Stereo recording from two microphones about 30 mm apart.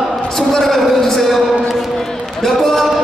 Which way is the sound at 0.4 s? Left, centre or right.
Centre.